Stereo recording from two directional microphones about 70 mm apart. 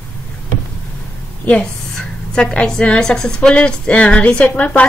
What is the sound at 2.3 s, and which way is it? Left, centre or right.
A woman's voice, centre.